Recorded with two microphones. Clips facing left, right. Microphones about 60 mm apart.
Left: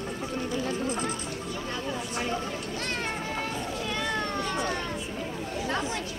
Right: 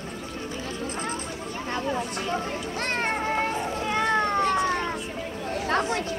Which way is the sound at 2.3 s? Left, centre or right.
Right.